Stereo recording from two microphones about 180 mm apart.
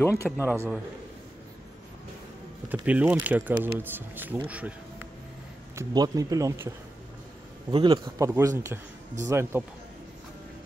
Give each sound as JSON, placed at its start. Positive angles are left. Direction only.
{"t": 0.0, "sound": "speech", "side_deg": 15}
{"t": 0.5, "sound": "speech", "side_deg": -10}
{"t": 2.7, "sound": "speech", "side_deg": -10}
{"t": 5.8, "sound": "speech", "side_deg": -20}
{"t": 7.7, "sound": "a man's voice", "side_deg": -25}